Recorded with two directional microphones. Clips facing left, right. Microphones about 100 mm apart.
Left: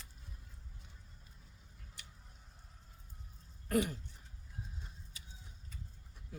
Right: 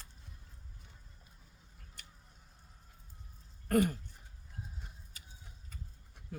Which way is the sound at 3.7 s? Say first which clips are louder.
Right 4 dB; 45° right (ahead or behind).